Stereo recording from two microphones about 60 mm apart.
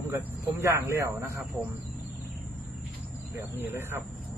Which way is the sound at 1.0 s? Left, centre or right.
Right.